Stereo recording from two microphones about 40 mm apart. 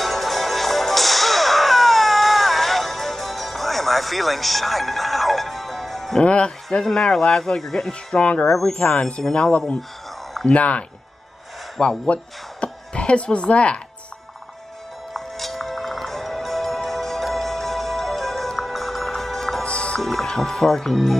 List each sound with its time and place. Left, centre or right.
0.0 s whip: centre
6.2 s speech: left
6.7 s speech: centre
8.2 s speech: left
8.5 s speech: centre
8.7 s speech: centre
15.1 s music: centre
19.6 s music: left
20.0 s speech: centre